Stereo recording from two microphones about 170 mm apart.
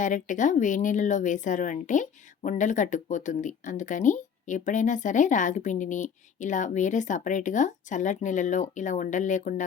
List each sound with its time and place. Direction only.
0.0 s speech: 50° left (ahead or behind)